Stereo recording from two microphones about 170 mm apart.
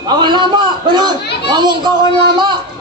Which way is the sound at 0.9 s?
25° right (ahead or behind).